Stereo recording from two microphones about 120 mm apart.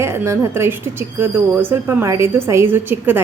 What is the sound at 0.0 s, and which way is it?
Speech, 20° right (ahead or behind).